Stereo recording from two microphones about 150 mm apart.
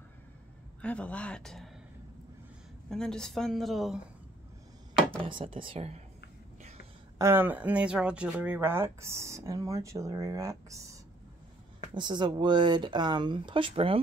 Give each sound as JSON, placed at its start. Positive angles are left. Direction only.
{"t": 0.8, "sound": "speech", "side_deg": 10}
{"t": 2.9, "sound": "a woman's voice", "side_deg": 5}
{"t": 5.3, "sound": "speech", "side_deg": -35}
{"t": 7.2, "sound": "speech", "side_deg": -15}
{"t": 11.9, "sound": "speech", "side_deg": -30}